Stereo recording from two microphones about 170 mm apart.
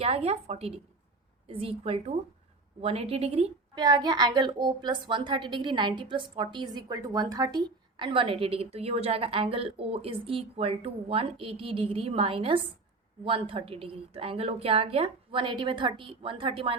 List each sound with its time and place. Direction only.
0.0 s a woman's voice: 35° right (ahead or behind)
3.8 s a woman's voice: 25° right (ahead or behind)